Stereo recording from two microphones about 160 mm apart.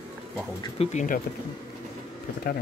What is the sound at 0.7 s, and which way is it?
Speech, 45° left (ahead or behind).